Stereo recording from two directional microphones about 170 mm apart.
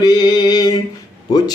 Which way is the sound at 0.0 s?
25° left (ahead or behind).